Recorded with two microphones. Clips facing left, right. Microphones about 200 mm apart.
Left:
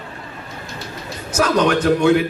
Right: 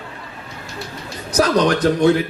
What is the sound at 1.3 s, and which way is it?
Speech, 35° right (ahead or behind).